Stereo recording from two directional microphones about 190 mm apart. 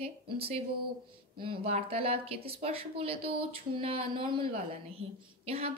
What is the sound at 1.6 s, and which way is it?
A woman's voice, 30° right (ahead or behind).